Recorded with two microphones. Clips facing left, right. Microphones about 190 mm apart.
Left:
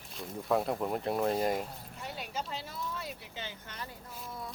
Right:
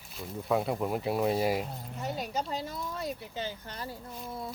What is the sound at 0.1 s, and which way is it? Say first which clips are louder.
Speech: right 1 dB; centre (ahead or behind).